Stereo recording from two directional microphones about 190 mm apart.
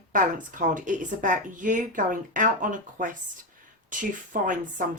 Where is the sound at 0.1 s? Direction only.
45° right (ahead or behind).